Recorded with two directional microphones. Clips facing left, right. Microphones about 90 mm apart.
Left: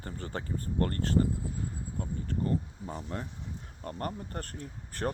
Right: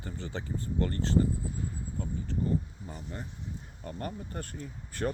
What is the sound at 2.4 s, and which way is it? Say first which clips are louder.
Speech: even; 85° left.